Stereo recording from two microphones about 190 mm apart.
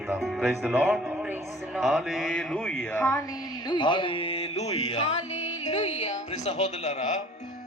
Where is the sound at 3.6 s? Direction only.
25° left (ahead or behind).